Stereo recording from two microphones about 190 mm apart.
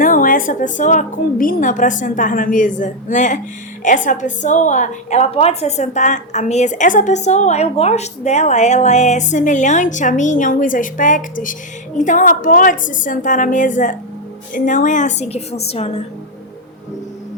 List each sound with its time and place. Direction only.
0.0 s a woman's voice: 45° left (ahead or behind)